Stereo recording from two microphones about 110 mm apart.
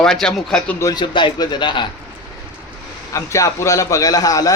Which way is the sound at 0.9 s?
45° left (ahead or behind).